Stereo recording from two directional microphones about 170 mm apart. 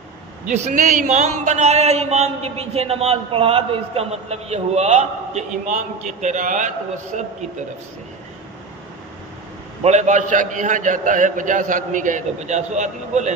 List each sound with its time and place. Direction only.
0.5 s a man's voice: 45° right (ahead or behind)
9.8 s a man's voice: 45° right (ahead or behind)